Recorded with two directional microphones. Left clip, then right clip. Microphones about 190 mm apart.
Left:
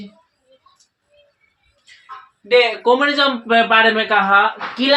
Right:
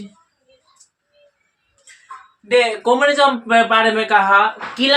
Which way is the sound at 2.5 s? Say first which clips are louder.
Left 1 dB; 25° left (ahead or behind).